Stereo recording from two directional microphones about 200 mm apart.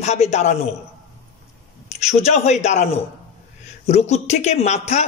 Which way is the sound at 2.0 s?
35° left (ahead or behind).